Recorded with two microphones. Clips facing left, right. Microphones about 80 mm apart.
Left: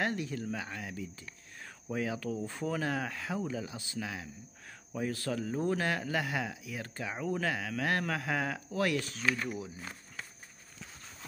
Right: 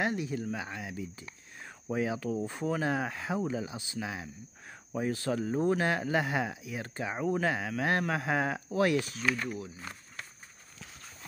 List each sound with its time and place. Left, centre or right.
0.0 s speech: centre
9.0 s speech: centre